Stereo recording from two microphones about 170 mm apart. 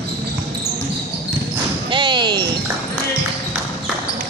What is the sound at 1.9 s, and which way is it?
Basketball bounce, 30° right (ahead or behind).